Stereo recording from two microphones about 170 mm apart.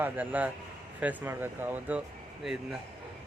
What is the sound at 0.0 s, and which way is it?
Speech, 10° right (ahead or behind).